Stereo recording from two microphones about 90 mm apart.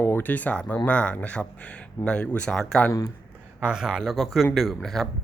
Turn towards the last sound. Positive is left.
turn(degrees=5)  # may be behind; listen again after turning